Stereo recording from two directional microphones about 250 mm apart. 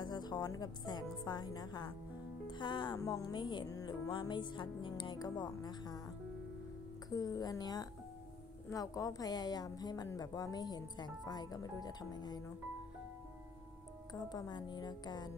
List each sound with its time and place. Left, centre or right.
0.0 s a woman's voice: centre
7.1 s a woman's voice: centre
14.1 s a woman's voice: centre